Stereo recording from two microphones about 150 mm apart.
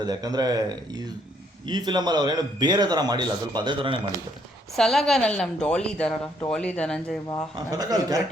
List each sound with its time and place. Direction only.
0.0 s a man's voice: 25° right (ahead or behind)
4.8 s a woman's voice: centre (ahead or behind)
7.7 s a man's voice: 25° right (ahead or behind)